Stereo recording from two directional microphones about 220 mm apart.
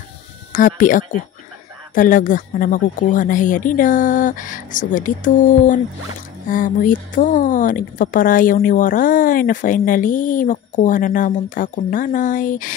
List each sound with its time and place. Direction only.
0.5 s speech: 35° left (ahead or behind)